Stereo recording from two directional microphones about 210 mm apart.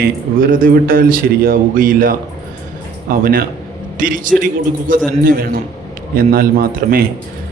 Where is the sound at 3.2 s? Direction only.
45° right (ahead or behind).